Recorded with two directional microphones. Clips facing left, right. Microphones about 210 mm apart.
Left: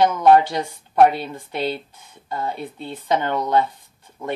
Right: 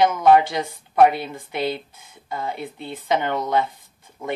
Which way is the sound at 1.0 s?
10° right (ahead or behind).